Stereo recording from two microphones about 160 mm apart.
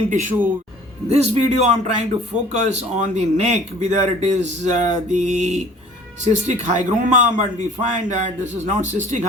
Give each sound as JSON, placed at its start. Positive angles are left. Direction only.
{"t": 0.1, "sound": "speech", "side_deg": -55}
{"t": 1.0, "sound": "a man's voice", "side_deg": -40}